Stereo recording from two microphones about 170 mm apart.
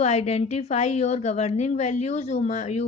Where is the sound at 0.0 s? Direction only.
40° left (ahead or behind).